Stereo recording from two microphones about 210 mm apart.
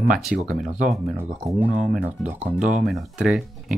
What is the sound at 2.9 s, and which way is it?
Speech, centre (ahead or behind).